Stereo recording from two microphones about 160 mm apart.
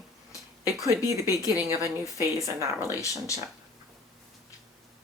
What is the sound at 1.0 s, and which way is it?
Speech, 20° left (ahead or behind).